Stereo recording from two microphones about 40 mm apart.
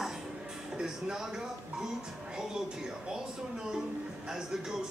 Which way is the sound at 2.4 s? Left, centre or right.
Centre.